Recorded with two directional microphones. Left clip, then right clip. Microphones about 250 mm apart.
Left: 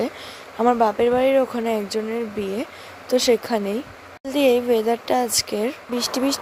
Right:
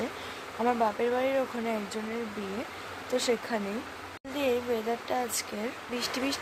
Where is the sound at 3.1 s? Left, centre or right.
Left.